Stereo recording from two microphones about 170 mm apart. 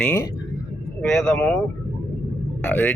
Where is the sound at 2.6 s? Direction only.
10° left (ahead or behind).